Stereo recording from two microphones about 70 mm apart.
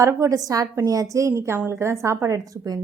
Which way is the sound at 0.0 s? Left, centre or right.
Right.